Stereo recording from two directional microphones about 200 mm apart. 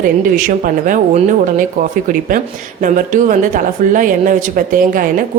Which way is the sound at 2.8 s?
40° right (ahead or behind).